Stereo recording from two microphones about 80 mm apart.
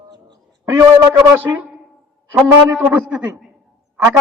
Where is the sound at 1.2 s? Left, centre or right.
Right.